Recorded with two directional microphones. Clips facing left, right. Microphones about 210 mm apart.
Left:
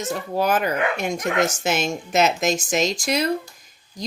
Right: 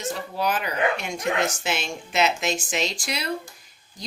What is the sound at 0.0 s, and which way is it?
Speech, 45° left (ahead or behind).